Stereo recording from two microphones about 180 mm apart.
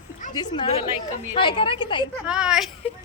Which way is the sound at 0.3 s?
25° left (ahead or behind).